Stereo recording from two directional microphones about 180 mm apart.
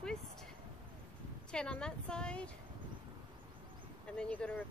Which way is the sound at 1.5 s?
5° left (ahead or behind).